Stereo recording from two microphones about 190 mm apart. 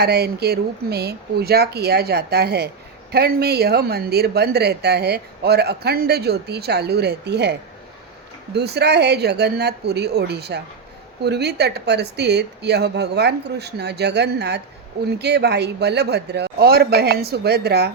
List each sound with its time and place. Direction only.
0.0 s speech: 60° right (ahead or behind)
8.5 s speech: 60° right (ahead or behind)